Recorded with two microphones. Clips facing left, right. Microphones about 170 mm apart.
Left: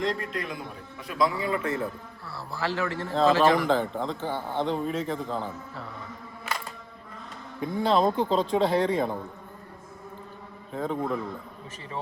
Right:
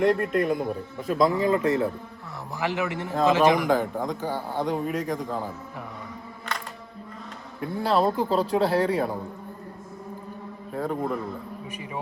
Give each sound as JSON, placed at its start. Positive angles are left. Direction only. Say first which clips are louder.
{"t": 0.0, "sound": "a man's voice", "louder": "right 8 dB", "side_deg": -55}
{"t": 2.6, "sound": "a man's voice", "louder": "right 2 dB", "side_deg": -15}
{"t": 6.5, "sound": "camera", "louder": "even", "side_deg": 5}
{"t": 7.6, "sound": "speech", "louder": "even", "side_deg": -5}
{"t": 10.7, "sound": "a man's voice", "louder": "right 1 dB", "side_deg": -5}